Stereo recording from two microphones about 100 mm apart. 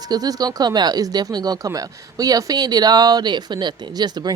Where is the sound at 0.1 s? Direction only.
40° right (ahead or behind).